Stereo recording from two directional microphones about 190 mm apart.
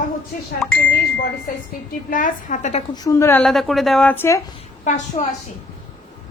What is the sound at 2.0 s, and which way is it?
Speech, 45° left (ahead or behind).